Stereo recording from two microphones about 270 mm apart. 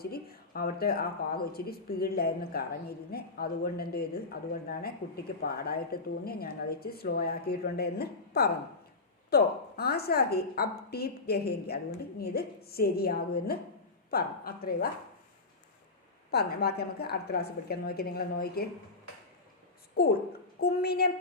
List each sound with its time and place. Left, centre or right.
0.0 s a woman's voice: left
16.3 s a woman's voice: left
20.0 s a woman's voice: left